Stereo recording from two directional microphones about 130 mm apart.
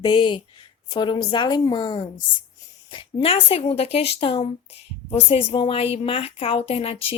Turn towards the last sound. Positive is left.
turn(degrees=45)  # may be behind; listen again after turning